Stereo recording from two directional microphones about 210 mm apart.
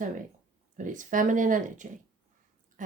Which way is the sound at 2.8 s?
40° right (ahead or behind).